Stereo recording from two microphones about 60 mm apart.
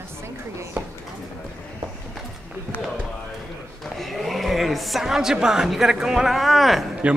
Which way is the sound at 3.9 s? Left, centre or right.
Centre.